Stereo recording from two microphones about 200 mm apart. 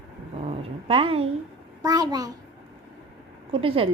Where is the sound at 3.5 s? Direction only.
30° right (ahead or behind).